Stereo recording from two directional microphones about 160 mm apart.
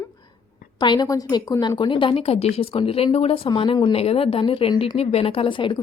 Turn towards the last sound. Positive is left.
turn(degrees=30)  # may be behind; listen again after turning